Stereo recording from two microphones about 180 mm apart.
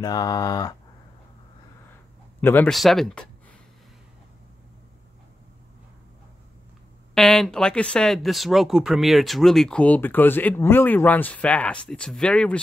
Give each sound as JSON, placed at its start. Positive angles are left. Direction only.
{"t": 0.0, "sound": "speech", "side_deg": 20}
{"t": 2.4, "sound": "speech", "side_deg": 10}
{"t": 7.2, "sound": "speech", "side_deg": 0}